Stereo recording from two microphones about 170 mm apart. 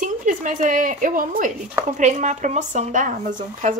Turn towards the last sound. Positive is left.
turn(degrees=-50)  # may be behind; listen again after turning